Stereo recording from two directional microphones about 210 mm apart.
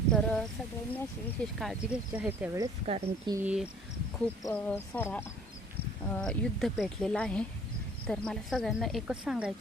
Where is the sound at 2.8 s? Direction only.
30° right (ahead or behind).